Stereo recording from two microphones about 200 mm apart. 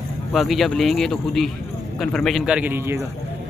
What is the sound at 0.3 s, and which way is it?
Speech, centre (ahead or behind).